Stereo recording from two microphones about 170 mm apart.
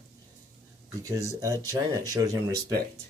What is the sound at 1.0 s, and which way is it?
Speech, 20° right (ahead or behind).